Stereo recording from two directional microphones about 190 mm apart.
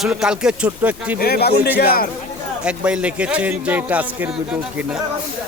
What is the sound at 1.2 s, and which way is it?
Speech, 55° left (ahead or behind).